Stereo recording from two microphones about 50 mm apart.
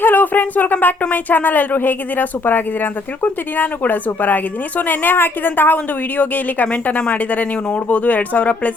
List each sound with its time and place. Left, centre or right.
0.0 s speech: left